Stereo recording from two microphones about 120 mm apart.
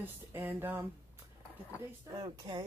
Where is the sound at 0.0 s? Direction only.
20° right (ahead or behind).